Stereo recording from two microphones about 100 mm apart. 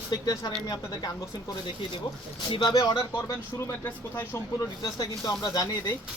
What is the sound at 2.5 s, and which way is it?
Speech, 45° left (ahead or behind).